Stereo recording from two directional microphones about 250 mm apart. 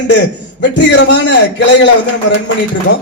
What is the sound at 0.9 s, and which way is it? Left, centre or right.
A man's voice, left.